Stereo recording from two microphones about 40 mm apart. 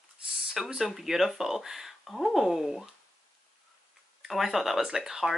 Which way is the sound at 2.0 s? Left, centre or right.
Centre.